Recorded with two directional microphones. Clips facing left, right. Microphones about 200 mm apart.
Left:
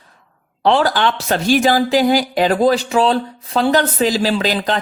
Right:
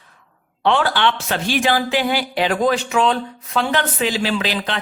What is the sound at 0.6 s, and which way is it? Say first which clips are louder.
Speech: left 3 dB; 35° left (ahead or behind).